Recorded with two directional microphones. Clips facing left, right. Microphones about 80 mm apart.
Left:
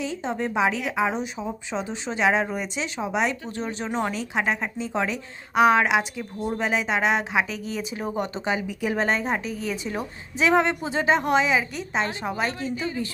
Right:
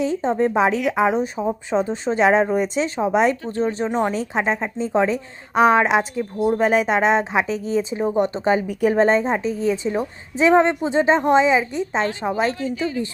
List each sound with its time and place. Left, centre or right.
0.0 s speech: right
3.8 s speech: centre
4.1 s a woman's voice: right
12.5 s a woman's voice: left